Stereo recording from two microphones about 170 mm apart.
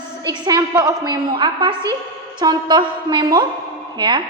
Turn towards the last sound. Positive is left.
turn(degrees=-25)  # may be behind; listen again after turning